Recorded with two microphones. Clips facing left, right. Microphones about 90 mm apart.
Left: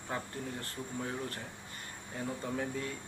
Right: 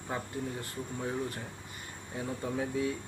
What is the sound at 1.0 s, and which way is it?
Speech, 10° right (ahead or behind).